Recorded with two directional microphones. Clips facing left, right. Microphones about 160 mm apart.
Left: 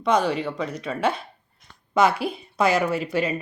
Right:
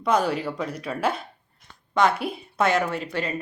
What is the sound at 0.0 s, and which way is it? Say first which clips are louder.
Speech: left 1 dB; 5° right (ahead or behind).